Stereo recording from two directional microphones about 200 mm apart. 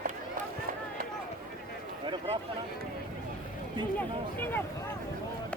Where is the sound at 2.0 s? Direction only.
25° right (ahead or behind).